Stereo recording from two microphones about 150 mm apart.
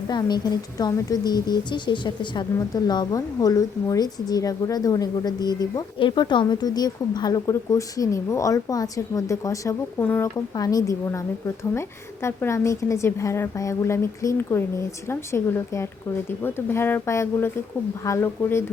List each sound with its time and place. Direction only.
0.1 s speech: 25° left (ahead or behind)